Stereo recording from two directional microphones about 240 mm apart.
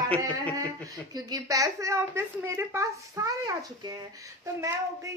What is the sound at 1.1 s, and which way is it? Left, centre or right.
Female singing, centre.